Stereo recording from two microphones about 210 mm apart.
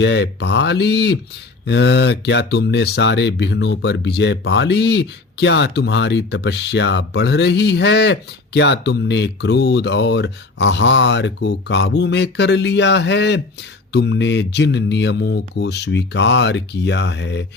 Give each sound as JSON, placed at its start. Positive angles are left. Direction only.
{"t": 0.0, "sound": "speech", "side_deg": 55}